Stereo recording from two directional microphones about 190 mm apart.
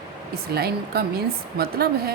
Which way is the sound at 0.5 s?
55° right (ahead or behind).